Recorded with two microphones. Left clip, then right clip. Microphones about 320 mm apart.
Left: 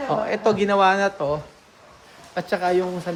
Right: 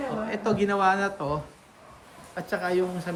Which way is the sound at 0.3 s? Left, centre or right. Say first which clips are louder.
Left 4 dB; centre.